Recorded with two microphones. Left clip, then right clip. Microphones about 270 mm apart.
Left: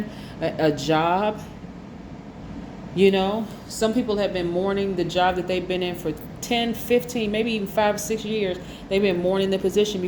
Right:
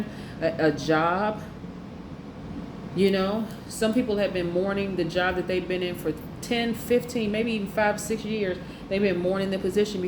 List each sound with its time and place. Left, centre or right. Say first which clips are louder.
0.3 s speech: left 1 dB; left
2.9 s speech: left 5 dB; left